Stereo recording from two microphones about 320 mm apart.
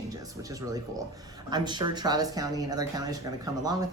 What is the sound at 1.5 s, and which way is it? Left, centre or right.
Speech, centre.